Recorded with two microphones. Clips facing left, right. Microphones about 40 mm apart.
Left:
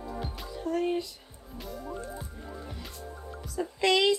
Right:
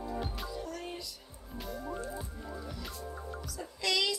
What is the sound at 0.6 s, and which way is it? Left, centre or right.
Speech, left.